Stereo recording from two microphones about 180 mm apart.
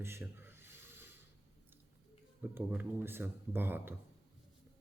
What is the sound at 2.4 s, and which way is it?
Speech, 10° right (ahead or behind).